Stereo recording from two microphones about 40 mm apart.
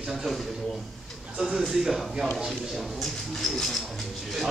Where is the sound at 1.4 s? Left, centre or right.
Centre.